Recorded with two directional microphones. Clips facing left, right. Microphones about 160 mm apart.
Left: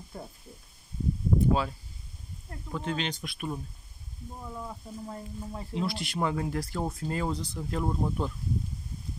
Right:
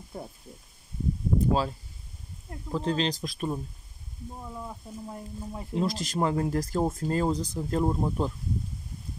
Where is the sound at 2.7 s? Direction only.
35° right (ahead or behind).